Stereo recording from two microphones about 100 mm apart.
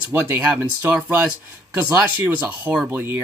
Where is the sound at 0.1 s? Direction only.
20° right (ahead or behind).